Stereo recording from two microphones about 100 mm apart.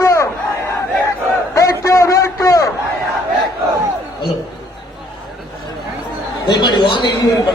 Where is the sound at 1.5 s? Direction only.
30° left (ahead or behind).